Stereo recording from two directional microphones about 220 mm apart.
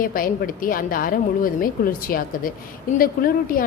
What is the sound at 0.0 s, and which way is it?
A woman's voice, 40° left (ahead or behind).